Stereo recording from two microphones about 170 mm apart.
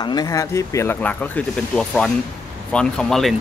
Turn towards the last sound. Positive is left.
turn(degrees=0)  # may be behind; listen again after turning